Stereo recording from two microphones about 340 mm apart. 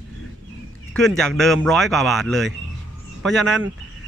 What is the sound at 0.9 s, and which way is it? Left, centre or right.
Speech, centre.